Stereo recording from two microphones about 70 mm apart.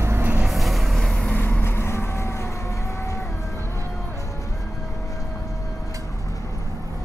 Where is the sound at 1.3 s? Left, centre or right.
Left.